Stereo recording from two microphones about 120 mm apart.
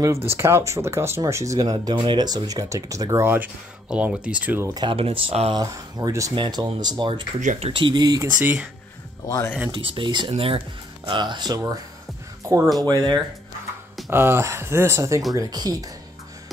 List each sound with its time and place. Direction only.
0.0 s speech: 20° right (ahead or behind)
4.7 s speech: 45° right (ahead or behind)
5.6 s speech: 30° right (ahead or behind)
7.3 s speech: 90° right
7.7 s speech: 40° right (ahead or behind)
8.3 s speech: 15° right (ahead or behind)
9.7 s speech: 40° right (ahead or behind)
12.8 s speech: 35° right (ahead or behind)
14.1 s speech: 20° right (ahead or behind)